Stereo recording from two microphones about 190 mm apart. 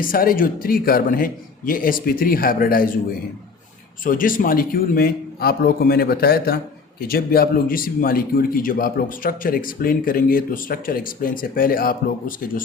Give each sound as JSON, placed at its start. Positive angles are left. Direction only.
{"t": 0.0, "sound": "speech", "side_deg": 50}
{"t": 4.0, "sound": "speech", "side_deg": 45}